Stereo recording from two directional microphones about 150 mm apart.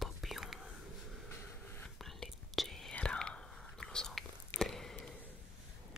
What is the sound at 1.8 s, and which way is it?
Whispering, centre (ahead or behind).